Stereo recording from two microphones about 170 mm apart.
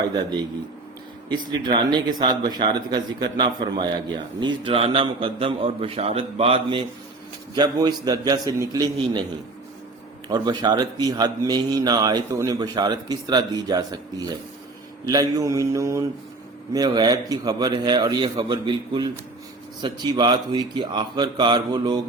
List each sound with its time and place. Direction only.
1.3 s speech: 25° right (ahead or behind)
10.3 s speech: 25° right (ahead or behind)